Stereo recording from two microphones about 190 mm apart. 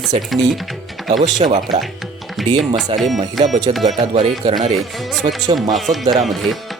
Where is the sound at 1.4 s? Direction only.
40° right (ahead or behind).